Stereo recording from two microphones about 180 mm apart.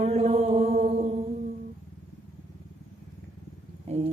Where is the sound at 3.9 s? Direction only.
35° right (ahead or behind).